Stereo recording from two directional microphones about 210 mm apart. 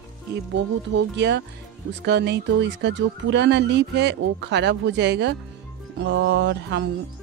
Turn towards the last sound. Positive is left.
turn(degrees=-55)  # may be behind; listen again after turning